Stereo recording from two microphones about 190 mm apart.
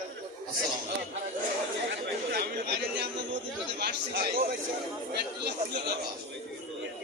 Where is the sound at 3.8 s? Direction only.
55° right (ahead or behind).